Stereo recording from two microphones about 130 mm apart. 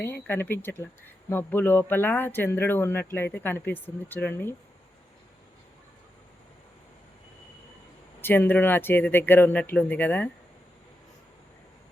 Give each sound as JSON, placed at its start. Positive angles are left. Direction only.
{"t": 0.0, "sound": "speech", "side_deg": 15}
{"t": 8.2, "sound": "speech", "side_deg": 15}